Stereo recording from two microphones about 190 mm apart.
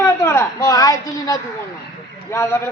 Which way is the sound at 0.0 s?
15° left (ahead or behind).